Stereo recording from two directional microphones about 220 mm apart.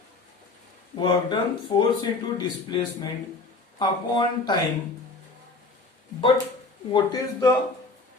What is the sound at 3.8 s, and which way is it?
Speech, 20° left (ahead or behind).